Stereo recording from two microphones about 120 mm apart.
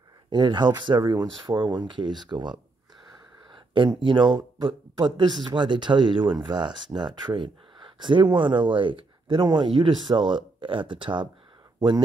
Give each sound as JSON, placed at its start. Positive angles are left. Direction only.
{"t": 0.3, "sound": "speech", "side_deg": -40}
{"t": 3.5, "sound": "speech", "side_deg": -45}